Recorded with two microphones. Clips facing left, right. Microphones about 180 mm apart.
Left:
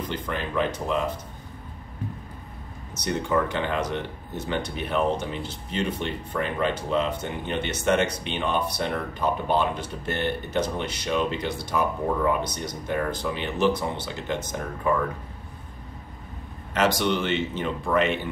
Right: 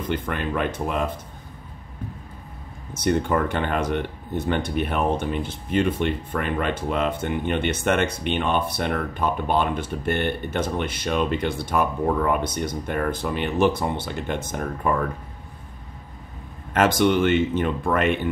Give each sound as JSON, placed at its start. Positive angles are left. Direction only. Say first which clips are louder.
{"t": 0.1, "sound": "speech", "louder": "right 5 dB", "side_deg": -55}
{"t": 2.9, "sound": "speech", "louder": "right 4 dB", "side_deg": -55}
{"t": 16.7, "sound": "speech", "louder": "right 4 dB", "side_deg": -50}